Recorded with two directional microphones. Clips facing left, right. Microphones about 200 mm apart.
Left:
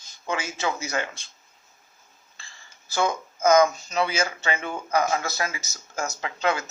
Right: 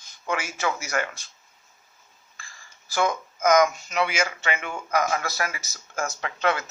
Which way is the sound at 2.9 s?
25° left (ahead or behind).